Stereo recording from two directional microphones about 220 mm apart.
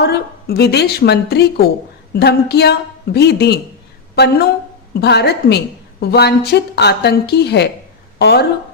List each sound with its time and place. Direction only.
0.0 s a woman's voice: 45° left (ahead or behind)